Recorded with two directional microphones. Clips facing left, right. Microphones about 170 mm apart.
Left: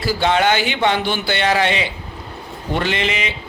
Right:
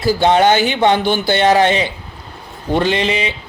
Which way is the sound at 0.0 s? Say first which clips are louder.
Right 5 dB; 45° right (ahead or behind).